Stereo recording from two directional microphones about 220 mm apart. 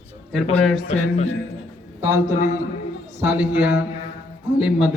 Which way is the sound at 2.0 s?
10° right (ahead or behind).